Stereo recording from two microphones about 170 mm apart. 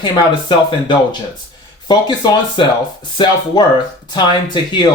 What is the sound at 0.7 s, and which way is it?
Speech, 30° left (ahead or behind).